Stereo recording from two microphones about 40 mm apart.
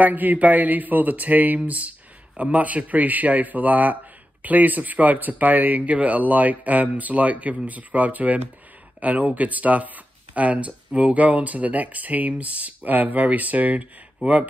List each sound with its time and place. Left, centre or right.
0.0 s a man's voice: right